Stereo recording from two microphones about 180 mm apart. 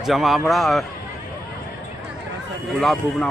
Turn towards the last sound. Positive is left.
turn(degrees=0)  # may be behind; listen again after turning